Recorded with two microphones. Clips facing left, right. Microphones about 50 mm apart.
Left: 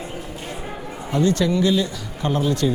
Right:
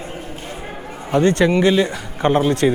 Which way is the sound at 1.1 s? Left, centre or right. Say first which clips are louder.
Right 4 dB; right.